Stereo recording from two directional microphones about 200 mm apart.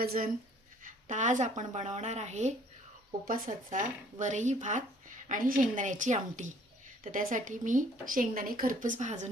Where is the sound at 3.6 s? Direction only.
40° right (ahead or behind).